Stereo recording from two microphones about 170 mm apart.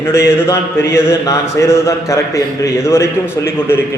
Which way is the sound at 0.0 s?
15° left (ahead or behind).